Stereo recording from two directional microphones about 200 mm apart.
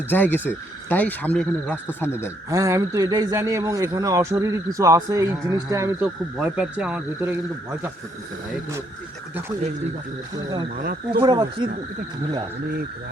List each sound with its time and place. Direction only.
0.1 s speech: 10° left (ahead or behind)
2.5 s speech: 15° right (ahead or behind)
10.3 s speech: 20° right (ahead or behind)